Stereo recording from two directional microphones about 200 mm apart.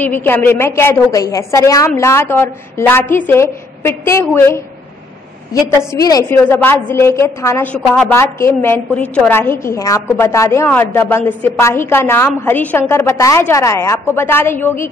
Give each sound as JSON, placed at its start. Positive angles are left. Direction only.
{"t": 0.0, "sound": "a woman's voice", "side_deg": 10}
{"t": 5.9, "sound": "a woman's voice", "side_deg": 20}